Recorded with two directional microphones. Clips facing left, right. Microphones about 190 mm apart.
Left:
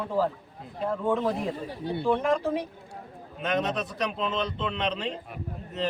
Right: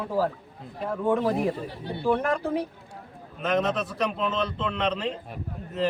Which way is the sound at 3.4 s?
Centre (ahead or behind).